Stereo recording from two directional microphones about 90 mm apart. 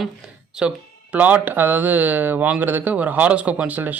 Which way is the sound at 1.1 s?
20° right (ahead or behind).